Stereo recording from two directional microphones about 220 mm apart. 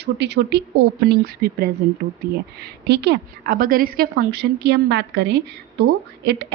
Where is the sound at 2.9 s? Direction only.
50° right (ahead or behind).